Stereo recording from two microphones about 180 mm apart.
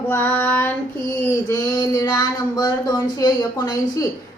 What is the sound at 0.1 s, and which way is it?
Child singing, 10° left (ahead or behind).